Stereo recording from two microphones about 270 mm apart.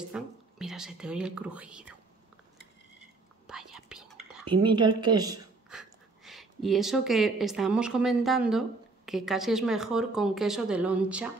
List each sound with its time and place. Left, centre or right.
0.1 s speech: centre
3.4 s whispering: centre
4.5 s a woman's voice: centre
5.7 s speech: centre